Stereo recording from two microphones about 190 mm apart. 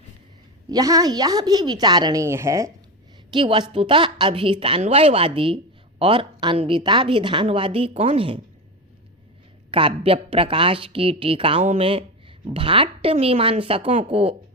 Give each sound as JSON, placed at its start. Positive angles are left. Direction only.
{"t": 0.7, "sound": "speech", "side_deg": -20}
{"t": 3.3, "sound": "speech", "side_deg": -25}
{"t": 9.7, "sound": "speech", "side_deg": -30}